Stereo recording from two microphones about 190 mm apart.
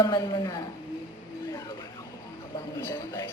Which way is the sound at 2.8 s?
15° left (ahead or behind).